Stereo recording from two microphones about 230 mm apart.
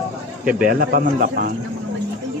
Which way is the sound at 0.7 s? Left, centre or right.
Right.